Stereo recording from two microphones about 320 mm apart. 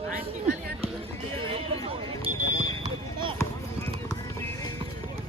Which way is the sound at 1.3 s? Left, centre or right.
Centre.